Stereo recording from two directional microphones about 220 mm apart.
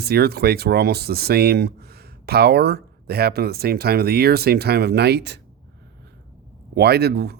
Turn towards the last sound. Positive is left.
turn(degrees=-45)  # may be behind; listen again after turning